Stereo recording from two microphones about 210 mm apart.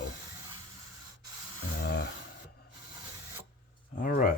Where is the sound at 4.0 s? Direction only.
40° left (ahead or behind).